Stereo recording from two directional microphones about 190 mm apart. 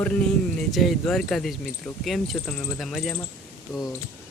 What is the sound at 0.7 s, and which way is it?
Speech, centre (ahead or behind).